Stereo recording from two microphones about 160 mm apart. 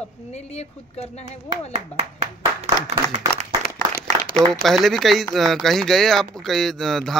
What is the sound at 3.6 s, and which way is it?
Applause, 70° left (ahead or behind).